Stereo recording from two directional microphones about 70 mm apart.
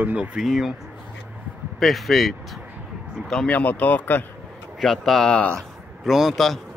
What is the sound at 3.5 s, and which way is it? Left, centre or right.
Speech, left.